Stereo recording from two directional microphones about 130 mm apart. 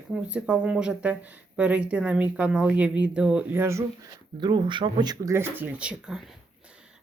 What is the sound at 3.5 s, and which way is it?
Speech, 20° right (ahead or behind).